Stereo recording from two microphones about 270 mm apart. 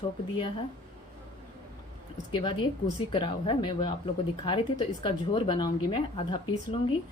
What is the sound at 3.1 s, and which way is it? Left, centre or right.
Speech, centre.